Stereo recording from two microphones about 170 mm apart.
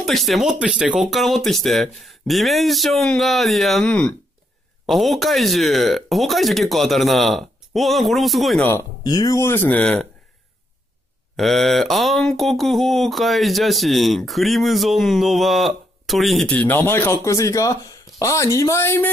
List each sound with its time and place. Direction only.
0.0 s speech: centre (ahead or behind)
8.6 s speech: 20° left (ahead or behind)
11.3 s speech: centre (ahead or behind)